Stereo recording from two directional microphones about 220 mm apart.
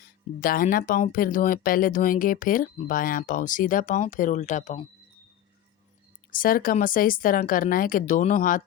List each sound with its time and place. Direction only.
0.3 s speech: 40° left (ahead or behind)
6.3 s speech: 40° left (ahead or behind)